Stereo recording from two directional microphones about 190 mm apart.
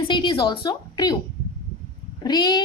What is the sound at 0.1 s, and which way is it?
A woman's voice, 25° left (ahead or behind).